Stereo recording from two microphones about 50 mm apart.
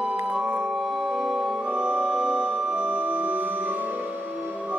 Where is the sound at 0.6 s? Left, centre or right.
Centre.